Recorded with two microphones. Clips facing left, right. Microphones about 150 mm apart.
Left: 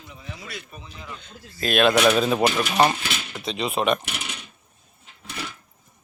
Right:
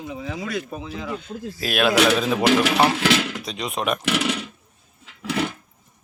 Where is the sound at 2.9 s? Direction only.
90° right.